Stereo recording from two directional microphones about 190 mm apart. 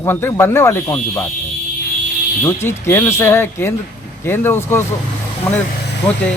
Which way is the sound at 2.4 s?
15° left (ahead or behind).